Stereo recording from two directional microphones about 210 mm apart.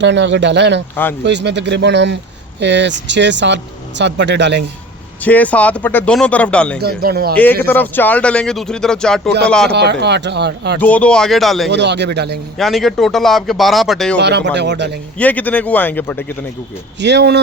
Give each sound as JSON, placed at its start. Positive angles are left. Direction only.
{"t": 0.0, "sound": "speech", "side_deg": -60}
{"t": 5.2, "sound": "speech", "side_deg": 5}
{"t": 6.7, "sound": "speech", "side_deg": -50}
{"t": 7.3, "sound": "speech", "side_deg": 10}
{"t": 9.7, "sound": "speech", "side_deg": -55}
{"t": 10.8, "sound": "speech", "side_deg": 5}
{"t": 11.7, "sound": "speech", "side_deg": -55}
{"t": 12.5, "sound": "speech", "side_deg": 0}
{"t": 14.2, "sound": "speech", "side_deg": -55}
{"t": 15.2, "sound": "speech", "side_deg": 5}
{"t": 17.0, "sound": "speech", "side_deg": -55}